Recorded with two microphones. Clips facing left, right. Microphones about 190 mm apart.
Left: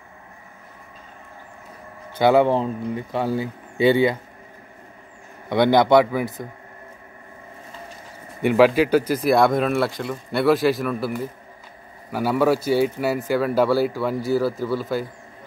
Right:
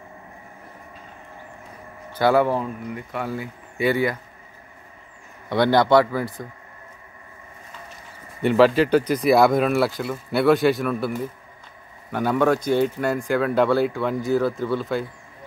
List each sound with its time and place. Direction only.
2.1 s speech: 20° left (ahead or behind)
5.5 s a man's voice: 20° left (ahead or behind)
8.4 s speech: 10° left (ahead or behind)